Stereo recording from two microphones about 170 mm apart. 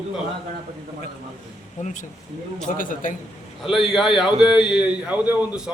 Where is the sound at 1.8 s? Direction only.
45° left (ahead or behind).